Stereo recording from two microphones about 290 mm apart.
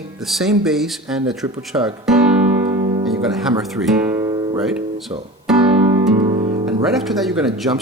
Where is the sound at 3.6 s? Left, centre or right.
Centre.